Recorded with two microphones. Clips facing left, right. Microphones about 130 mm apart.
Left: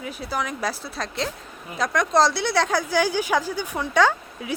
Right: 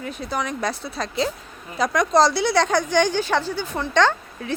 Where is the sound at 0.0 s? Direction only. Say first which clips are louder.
Right 1 dB; 5° left (ahead or behind).